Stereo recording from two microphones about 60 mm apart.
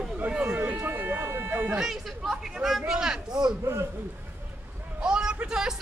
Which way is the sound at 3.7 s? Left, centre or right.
Right.